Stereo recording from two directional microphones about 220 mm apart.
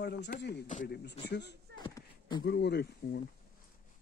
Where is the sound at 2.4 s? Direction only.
50° left (ahead or behind).